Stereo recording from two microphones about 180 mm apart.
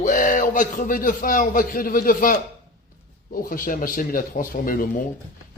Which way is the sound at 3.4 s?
50° left (ahead or behind).